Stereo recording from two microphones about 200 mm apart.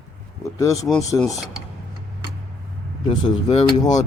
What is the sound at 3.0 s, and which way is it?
Speech, 25° left (ahead or behind).